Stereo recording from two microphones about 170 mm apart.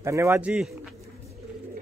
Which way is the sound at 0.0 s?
15° right (ahead or behind).